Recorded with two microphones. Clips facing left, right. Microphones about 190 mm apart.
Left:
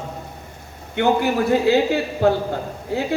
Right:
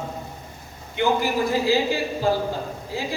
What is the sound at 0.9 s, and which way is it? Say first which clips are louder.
Speech: left 3 dB; 60° left (ahead or behind).